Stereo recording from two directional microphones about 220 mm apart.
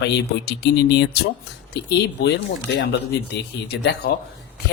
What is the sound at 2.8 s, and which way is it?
Speech, 50° left (ahead or behind).